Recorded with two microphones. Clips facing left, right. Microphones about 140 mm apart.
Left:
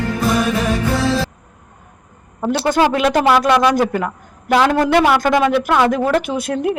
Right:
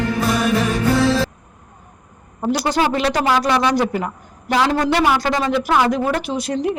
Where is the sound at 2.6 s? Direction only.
50° left (ahead or behind).